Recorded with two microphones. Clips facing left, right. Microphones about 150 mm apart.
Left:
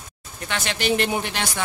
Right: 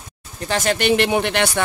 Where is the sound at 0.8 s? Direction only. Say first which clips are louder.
Right 3 dB; 75° right (ahead or behind).